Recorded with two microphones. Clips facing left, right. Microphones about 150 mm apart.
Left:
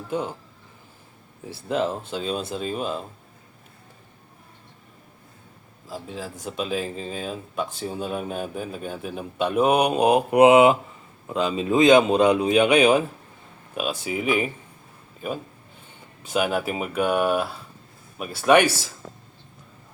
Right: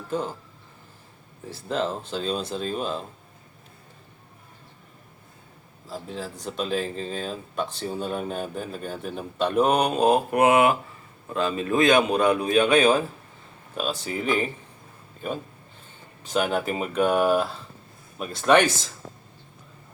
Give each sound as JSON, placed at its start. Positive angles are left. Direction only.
{"t": 1.5, "sound": "speech", "side_deg": 10}
{"t": 5.9, "sound": "a man's voice", "side_deg": 5}